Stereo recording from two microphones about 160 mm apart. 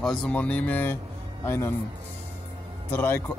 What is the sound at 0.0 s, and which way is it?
A man's voice, 5° left (ahead or behind).